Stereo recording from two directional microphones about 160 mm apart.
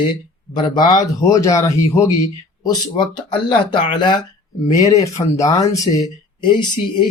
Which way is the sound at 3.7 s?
30° left (ahead or behind).